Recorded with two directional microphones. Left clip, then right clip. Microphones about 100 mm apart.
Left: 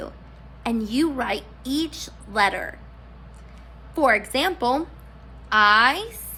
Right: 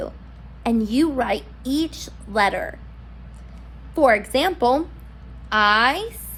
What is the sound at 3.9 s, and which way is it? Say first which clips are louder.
A woman's voice: right 3 dB; 10° right (ahead or behind).